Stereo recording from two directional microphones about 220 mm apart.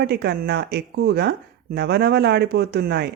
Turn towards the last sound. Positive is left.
turn(degrees=-45)  # may be behind; listen again after turning